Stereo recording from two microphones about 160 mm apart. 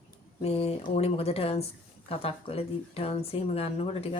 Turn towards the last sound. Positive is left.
turn(degrees=40)  # may be behind; listen again after turning